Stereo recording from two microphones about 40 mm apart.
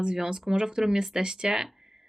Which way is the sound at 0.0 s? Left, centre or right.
Centre.